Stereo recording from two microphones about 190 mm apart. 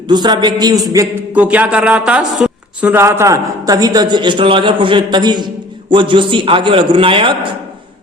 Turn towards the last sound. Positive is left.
turn(degrees=-25)  # may be behind; listen again after turning